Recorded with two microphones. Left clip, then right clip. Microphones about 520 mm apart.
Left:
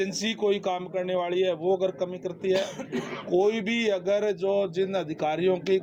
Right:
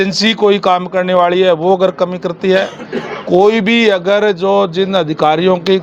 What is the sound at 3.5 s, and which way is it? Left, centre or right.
A man's voice, right.